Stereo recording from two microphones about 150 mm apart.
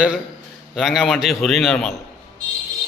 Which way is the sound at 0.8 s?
Centre (ahead or behind).